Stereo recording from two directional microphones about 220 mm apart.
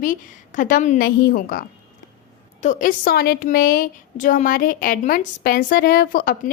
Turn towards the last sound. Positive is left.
turn(degrees=40)  # may be behind; listen again after turning